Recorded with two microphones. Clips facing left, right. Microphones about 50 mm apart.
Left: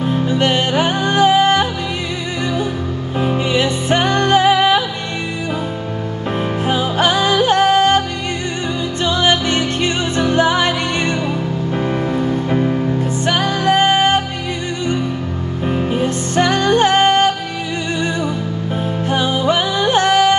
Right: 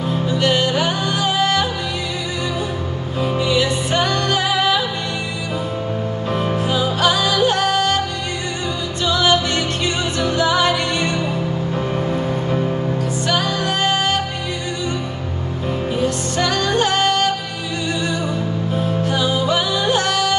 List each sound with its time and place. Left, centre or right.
0.1 s music: left
3.2 s music: left
6.6 s music: left
9.0 s music: left
12.4 s music: left
15.9 s music: left
18.8 s music: left